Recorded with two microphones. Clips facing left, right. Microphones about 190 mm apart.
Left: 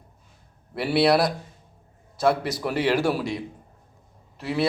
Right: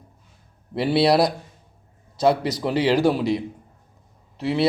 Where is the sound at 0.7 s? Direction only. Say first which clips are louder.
Right 2 dB; 20° right (ahead or behind).